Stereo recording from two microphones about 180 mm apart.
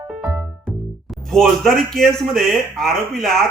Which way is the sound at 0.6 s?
Centre (ahead or behind).